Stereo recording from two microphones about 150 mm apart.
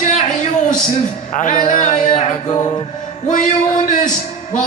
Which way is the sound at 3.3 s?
60° left (ahead or behind).